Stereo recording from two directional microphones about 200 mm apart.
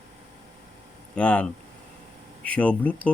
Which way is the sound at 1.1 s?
5° left (ahead or behind).